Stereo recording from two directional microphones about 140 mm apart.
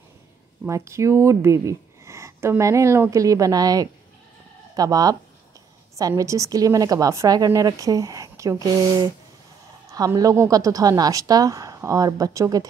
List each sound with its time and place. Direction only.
0.7 s speech: 20° right (ahead or behind)